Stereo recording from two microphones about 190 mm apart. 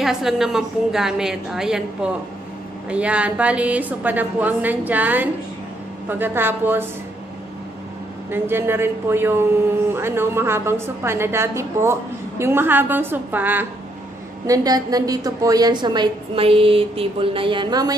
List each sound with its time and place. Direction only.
0.0 s a woman's voice: centre (ahead or behind)
2.9 s a man's voice: 5° right (ahead or behind)
8.3 s a man's voice: 10° right (ahead or behind)